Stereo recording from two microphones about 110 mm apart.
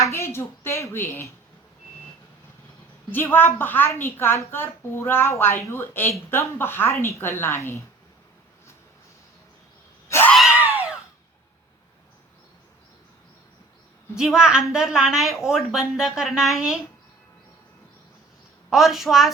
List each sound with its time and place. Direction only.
0.0 s a woman's voice: 25° left (ahead or behind)
3.1 s a woman's voice: 20° left (ahead or behind)
10.1 s cat: 20° left (ahead or behind)
10.5 s screaming: 15° right (ahead or behind)
14.2 s speech: 5° right (ahead or behind)
18.7 s speech: centre (ahead or behind)